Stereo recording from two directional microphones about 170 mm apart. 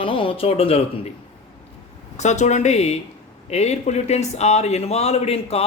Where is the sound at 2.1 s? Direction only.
40° left (ahead or behind).